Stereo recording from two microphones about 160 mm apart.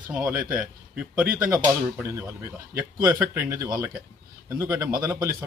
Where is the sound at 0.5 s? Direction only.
5° right (ahead or behind).